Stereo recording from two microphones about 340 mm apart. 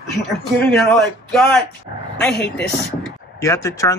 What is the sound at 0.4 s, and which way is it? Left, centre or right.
Speech, centre.